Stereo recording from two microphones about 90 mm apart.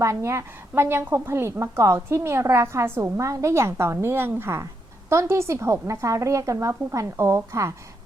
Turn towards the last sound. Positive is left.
turn(degrees=-35)  # may be behind; listen again after turning